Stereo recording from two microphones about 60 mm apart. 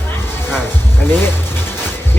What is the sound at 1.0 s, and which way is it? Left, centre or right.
Speech, left.